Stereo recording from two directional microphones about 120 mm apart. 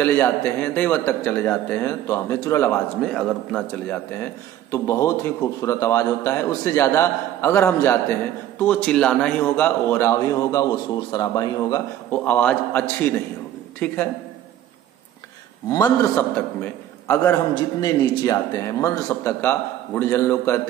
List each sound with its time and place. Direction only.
0.0 s a man's voice: 20° left (ahead or behind)
3.0 s a man's voice: 5° left (ahead or behind)
3.9 s a man's voice: 20° left (ahead or behind)
12.1 s a man's voice: 10° left (ahead or behind)
15.7 s a man's voice: 30° left (ahead or behind)
16.2 s a man's voice: 20° left (ahead or behind)
17.2 s a man's voice: 30° left (ahead or behind)